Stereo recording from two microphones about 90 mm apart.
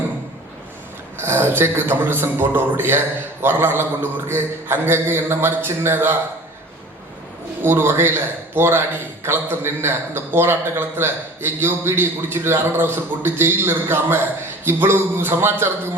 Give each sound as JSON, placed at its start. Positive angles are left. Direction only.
{"t": 1.2, "sound": "a man's voice", "side_deg": -25}
{"t": 7.6, "sound": "a man's voice", "side_deg": -25}